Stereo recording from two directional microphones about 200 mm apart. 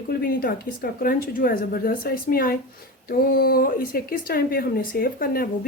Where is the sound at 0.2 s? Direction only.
45° left (ahead or behind).